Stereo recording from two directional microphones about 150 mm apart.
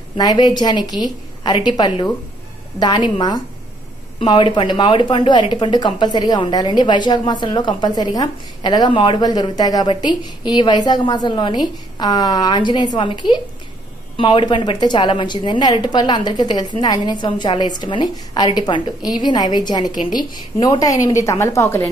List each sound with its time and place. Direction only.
0.2 s a woman's voice: 25° left (ahead or behind)